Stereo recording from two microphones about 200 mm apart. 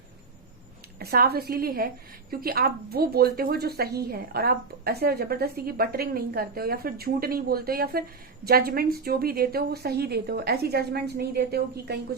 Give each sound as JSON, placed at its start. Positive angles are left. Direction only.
{"t": 0.9, "sound": "a woman's voice", "side_deg": -50}